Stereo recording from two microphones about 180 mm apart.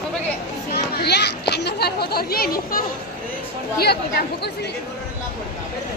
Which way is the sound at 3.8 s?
60° left (ahead or behind).